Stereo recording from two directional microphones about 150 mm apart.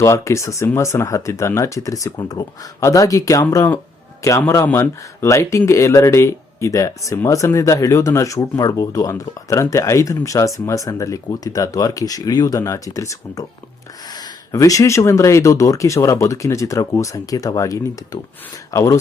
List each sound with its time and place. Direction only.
0.0 s speech: 20° left (ahead or behind)